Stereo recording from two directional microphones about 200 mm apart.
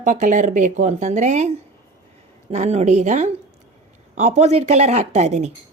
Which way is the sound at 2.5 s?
35° right (ahead or behind).